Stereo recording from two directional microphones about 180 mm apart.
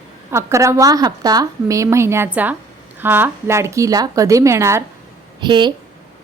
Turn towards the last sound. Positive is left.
turn(degrees=-25)  # may be behind; listen again after turning